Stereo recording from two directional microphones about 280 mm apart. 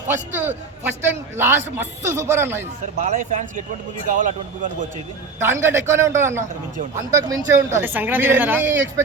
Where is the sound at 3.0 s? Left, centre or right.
Right.